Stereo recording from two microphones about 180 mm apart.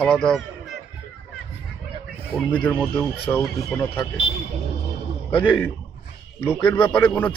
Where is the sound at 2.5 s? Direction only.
10° left (ahead or behind).